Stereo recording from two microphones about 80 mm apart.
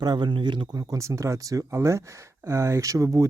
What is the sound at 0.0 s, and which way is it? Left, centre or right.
Speech, right.